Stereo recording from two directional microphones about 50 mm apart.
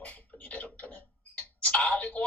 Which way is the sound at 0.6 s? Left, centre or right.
Left.